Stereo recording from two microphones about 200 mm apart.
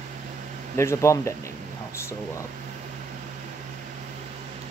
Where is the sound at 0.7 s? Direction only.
15° left (ahead or behind).